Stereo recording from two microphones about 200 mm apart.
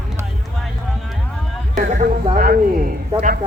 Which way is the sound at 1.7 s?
40° right (ahead or behind).